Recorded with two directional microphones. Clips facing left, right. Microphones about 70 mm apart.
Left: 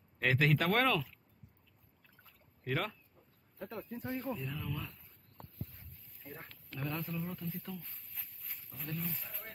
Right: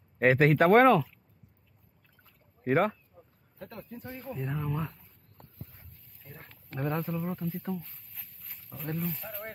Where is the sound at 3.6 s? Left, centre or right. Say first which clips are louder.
Even; centre.